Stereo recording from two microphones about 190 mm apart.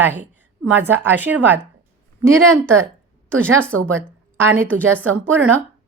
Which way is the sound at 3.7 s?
90° right.